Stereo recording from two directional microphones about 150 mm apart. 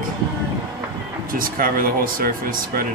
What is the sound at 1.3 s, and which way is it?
Speech, 70° right (ahead or behind).